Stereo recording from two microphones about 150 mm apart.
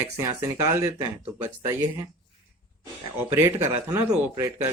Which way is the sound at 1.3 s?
10° right (ahead or behind).